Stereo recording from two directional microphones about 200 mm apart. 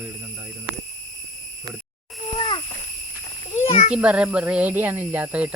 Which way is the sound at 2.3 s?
25° left (ahead or behind).